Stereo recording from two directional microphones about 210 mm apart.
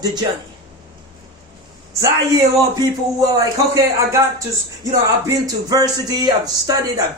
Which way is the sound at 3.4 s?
15° right (ahead or behind).